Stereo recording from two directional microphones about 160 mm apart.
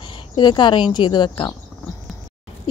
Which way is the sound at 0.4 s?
30° left (ahead or behind).